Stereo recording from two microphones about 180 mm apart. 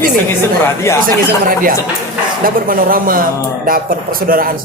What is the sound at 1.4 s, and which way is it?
A man's voice, 50° right (ahead or behind).